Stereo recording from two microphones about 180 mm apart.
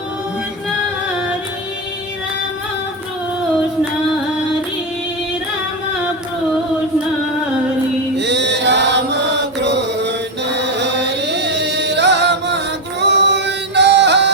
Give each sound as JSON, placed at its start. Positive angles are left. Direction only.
{"t": 8.1, "sound": "chant", "side_deg": -75}